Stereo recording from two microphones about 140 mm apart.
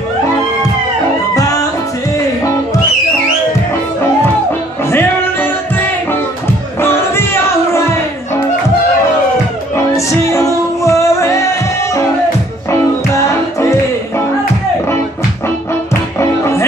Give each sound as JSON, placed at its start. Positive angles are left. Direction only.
{"t": 1.3, "sound": "music", "side_deg": 25}
{"t": 4.8, "sound": "music", "side_deg": 15}
{"t": 6.8, "sound": "music", "side_deg": 15}
{"t": 9.9, "sound": "music", "side_deg": 20}
{"t": 13.6, "sound": "music", "side_deg": 20}
{"t": 15.9, "sound": "music", "side_deg": 20}